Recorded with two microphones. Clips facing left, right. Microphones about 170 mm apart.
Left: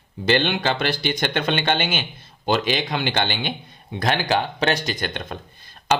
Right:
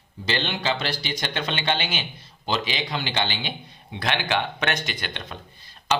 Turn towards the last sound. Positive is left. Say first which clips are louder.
# left 3 dB
turn(degrees=50)  # may be behind; listen again after turning